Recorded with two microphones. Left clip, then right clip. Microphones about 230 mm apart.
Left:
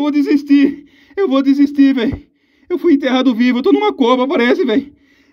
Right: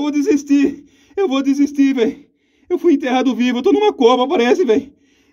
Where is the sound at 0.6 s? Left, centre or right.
Centre.